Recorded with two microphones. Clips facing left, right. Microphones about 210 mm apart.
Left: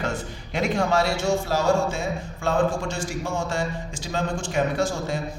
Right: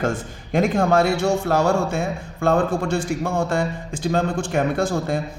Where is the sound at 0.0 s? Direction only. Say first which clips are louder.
Right 5 dB; 50° right (ahead or behind).